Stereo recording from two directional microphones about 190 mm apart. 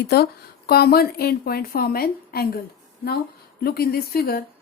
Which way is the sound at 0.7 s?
55° left (ahead or behind).